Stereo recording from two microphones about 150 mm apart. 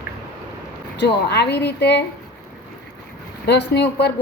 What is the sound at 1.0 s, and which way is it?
Speech, 90° left.